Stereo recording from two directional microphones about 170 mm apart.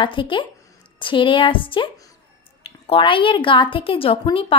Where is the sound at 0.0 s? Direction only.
30° left (ahead or behind).